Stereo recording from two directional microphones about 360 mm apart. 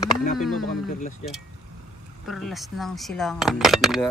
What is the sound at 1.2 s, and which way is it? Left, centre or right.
Speech, centre.